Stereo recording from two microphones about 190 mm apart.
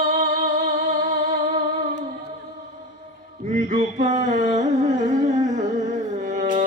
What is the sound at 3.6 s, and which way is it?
Mantra, 40° right (ahead or behind).